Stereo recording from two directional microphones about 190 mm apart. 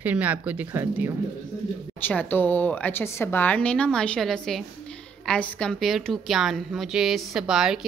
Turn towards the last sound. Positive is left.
turn(degrees=-5)  # may be behind; listen again after turning